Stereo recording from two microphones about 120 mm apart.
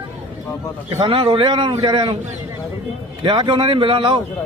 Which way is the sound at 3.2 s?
40° right (ahead or behind).